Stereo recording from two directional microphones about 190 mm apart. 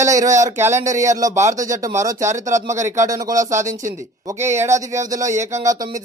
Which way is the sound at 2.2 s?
40° right (ahead or behind).